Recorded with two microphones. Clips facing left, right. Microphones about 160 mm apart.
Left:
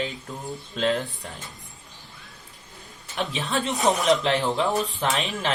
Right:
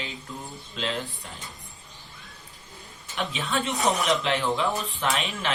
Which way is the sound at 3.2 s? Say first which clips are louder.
Left 2 dB; 40° left (ahead or behind).